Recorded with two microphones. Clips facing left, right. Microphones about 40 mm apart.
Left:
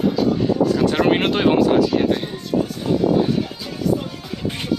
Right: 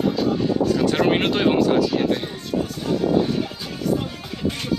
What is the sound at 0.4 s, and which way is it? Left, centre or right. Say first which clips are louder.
Speech: left 2 dB; centre.